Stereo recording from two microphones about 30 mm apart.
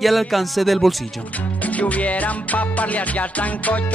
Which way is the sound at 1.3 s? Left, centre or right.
Left.